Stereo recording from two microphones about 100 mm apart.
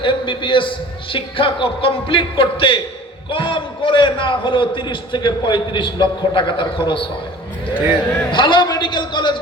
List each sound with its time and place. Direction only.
0.0 s a man's voice: 55° left (ahead or behind)
7.7 s speech: 20° right (ahead or behind)
8.3 s a man's voice: 50° left (ahead or behind)